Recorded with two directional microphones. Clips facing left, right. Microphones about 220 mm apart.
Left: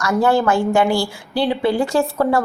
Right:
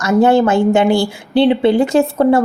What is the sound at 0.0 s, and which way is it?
Speech, 20° right (ahead or behind).